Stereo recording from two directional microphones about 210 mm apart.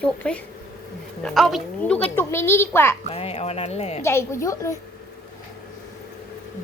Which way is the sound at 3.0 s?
30° left (ahead or behind).